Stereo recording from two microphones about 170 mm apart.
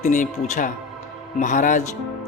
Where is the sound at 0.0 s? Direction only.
45° left (ahead or behind).